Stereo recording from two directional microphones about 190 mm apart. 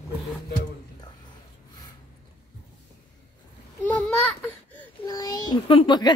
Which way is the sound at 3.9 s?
5° left (ahead or behind).